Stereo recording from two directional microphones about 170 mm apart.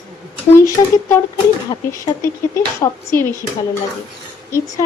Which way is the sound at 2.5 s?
15° left (ahead or behind).